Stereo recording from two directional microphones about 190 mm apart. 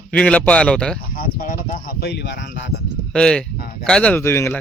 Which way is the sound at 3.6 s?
50° left (ahead or behind).